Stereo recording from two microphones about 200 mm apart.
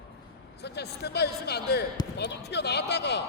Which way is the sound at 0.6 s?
55° left (ahead or behind).